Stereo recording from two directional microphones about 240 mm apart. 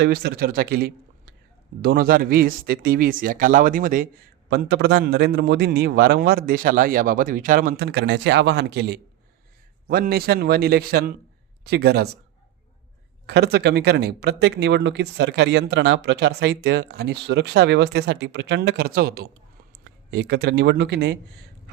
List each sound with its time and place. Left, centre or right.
0.0 s speech: right
13.2 s speech: right